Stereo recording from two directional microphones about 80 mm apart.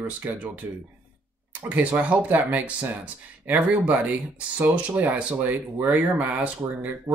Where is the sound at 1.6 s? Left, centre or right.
Centre.